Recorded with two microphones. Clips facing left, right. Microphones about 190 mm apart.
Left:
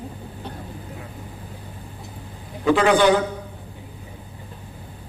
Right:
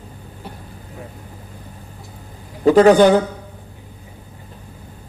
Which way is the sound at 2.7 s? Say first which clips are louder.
Right 7 dB; 40° right (ahead or behind).